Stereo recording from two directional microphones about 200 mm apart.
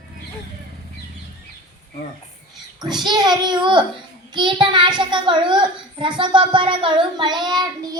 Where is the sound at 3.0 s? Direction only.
20° right (ahead or behind).